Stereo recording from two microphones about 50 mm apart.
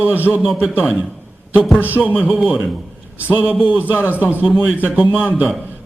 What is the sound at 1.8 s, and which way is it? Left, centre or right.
Speech, right.